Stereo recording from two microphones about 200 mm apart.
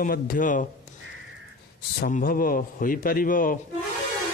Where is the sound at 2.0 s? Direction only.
45° left (ahead or behind).